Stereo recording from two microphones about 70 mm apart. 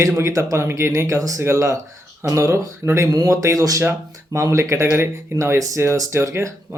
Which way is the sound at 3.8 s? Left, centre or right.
Right.